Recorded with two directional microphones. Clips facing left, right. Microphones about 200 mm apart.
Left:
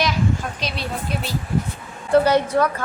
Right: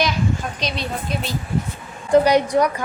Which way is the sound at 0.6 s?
5° left (ahead or behind).